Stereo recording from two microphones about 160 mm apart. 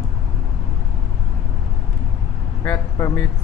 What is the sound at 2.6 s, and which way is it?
Speech, 20° left (ahead or behind).